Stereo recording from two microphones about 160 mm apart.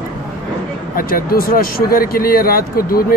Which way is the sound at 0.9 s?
65° left (ahead or behind).